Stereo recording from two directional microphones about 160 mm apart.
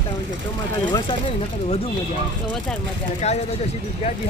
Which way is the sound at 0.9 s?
30° left (ahead or behind).